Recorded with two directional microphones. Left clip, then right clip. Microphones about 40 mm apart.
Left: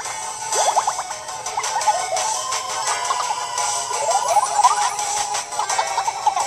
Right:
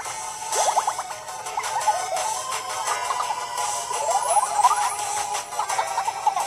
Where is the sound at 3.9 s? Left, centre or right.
Right.